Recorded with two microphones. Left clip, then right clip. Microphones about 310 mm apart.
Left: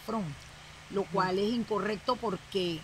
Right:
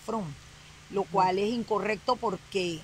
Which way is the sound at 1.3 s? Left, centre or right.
Right.